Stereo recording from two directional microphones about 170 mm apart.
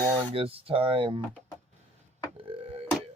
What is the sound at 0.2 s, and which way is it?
Speech, 35° right (ahead or behind).